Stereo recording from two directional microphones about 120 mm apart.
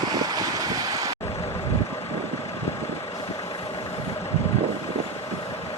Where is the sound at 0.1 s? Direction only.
30° right (ahead or behind).